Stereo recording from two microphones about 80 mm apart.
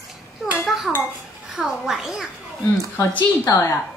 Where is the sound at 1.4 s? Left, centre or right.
Centre.